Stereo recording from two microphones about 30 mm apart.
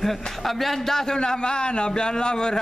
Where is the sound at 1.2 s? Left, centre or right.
Left.